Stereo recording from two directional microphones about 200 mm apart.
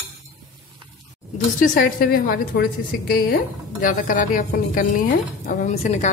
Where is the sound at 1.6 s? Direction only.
45° left (ahead or behind).